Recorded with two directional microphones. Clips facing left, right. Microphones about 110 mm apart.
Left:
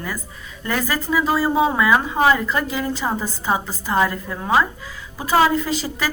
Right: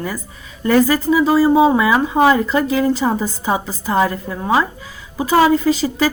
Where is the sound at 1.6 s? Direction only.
25° right (ahead or behind).